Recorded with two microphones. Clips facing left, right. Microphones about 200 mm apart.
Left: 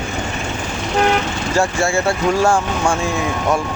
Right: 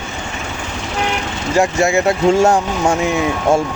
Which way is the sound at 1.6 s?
20° right (ahead or behind).